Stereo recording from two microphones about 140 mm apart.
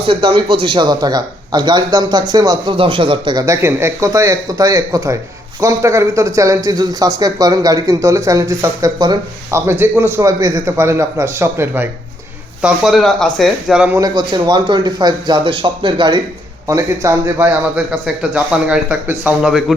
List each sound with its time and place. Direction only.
0.1 s a man's voice: 40° right (ahead or behind)
3.4 s speech: 20° right (ahead or behind)
9.6 s speech: 15° right (ahead or behind)
12.6 s speech: centre (ahead or behind)
14.0 s a man's voice: 30° right (ahead or behind)
16.6 s a man's voice: 20° right (ahead or behind); by 19.7 s centre (ahead or behind)